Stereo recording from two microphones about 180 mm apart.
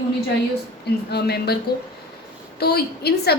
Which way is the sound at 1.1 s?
65° left (ahead or behind).